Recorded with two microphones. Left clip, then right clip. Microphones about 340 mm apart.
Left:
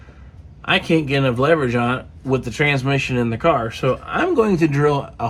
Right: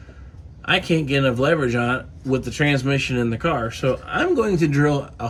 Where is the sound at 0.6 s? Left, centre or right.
Centre.